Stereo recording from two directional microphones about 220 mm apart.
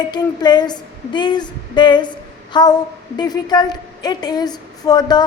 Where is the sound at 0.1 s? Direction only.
20° left (ahead or behind).